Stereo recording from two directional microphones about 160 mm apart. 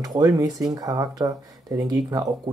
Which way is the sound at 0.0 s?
25° right (ahead or behind).